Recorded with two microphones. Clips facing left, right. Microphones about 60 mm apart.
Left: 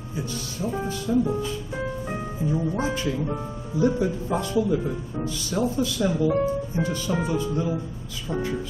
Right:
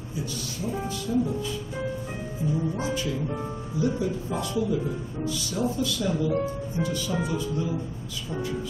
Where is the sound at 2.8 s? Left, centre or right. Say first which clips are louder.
Left 3 dB; left.